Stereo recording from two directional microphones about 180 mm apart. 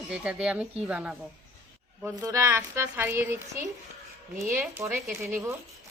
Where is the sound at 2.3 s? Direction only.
15° right (ahead or behind).